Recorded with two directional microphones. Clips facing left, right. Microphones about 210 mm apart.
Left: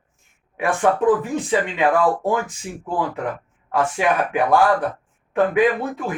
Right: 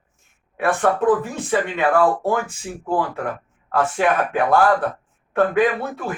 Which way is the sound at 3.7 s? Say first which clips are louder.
Right 1 dB; 15° left (ahead or behind).